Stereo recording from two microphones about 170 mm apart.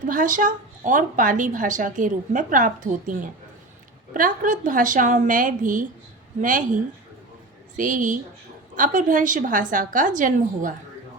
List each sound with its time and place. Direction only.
0.0 s a woman's voice: 50° right (ahead or behind)
7.8 s a woman's voice: 50° right (ahead or behind)